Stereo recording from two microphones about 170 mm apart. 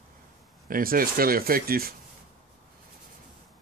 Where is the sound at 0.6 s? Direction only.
55° right (ahead or behind).